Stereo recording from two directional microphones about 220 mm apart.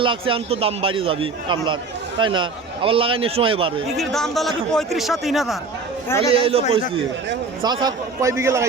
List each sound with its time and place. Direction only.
0.0 s a man's voice: 25° right (ahead or behind)
3.8 s a man's voice: centre (ahead or behind)
6.3 s a man's voice: 25° right (ahead or behind)